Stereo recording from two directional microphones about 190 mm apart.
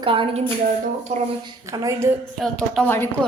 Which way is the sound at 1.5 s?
20° right (ahead or behind).